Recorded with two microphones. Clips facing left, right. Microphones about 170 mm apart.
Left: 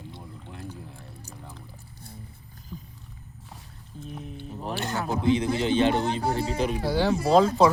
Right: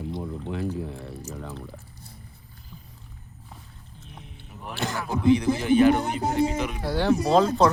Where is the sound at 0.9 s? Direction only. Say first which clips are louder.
Right 9 dB; 90° right.